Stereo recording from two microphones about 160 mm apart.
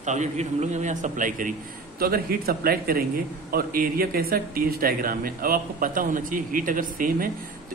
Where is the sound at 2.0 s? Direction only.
70° right (ahead or behind).